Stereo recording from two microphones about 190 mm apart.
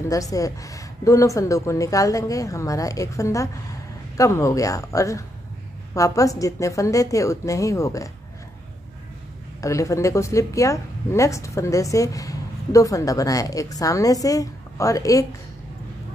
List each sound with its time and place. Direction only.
0.1 s a woman's voice: 15° left (ahead or behind)
9.6 s a woman's voice: 15° left (ahead or behind)